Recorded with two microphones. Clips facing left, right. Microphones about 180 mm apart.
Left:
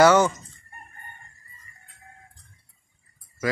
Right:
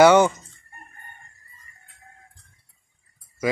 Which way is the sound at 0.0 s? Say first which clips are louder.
Right 3 dB; 15° right (ahead or behind).